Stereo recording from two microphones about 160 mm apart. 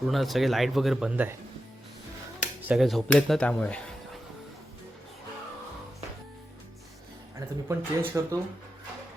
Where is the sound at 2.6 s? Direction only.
5° right (ahead or behind).